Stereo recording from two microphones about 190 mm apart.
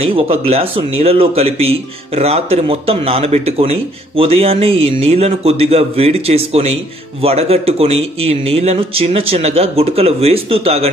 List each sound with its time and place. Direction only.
0.0 s speech: 30° right (ahead or behind)